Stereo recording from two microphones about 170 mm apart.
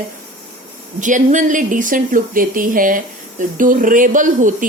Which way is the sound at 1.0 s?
50° right (ahead or behind).